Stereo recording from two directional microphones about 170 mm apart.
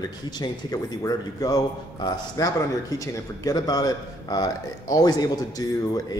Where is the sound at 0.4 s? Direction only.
25° left (ahead or behind).